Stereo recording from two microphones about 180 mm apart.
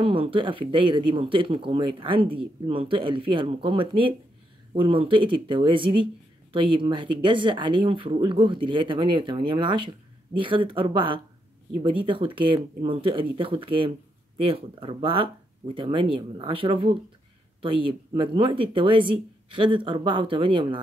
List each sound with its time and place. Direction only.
0.0 s speech: 30° right (ahead or behind)